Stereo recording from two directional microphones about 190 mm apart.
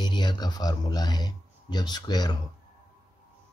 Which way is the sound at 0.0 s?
25° left (ahead or behind).